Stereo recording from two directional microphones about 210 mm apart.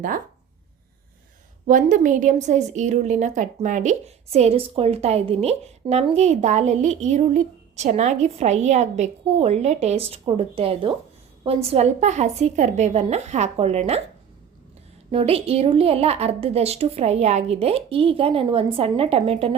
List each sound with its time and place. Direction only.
1.6 s a woman's voice: 40° right (ahead or behind)
15.1 s a woman's voice: 30° right (ahead or behind)